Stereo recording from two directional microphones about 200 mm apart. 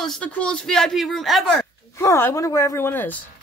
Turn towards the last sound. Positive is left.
turn(degrees=10)  # may be behind; listen again after turning